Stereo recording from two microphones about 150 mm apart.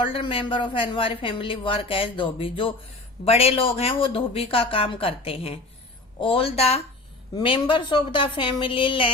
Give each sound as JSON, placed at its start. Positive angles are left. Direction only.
{"t": 0.0, "sound": "speech", "side_deg": 35}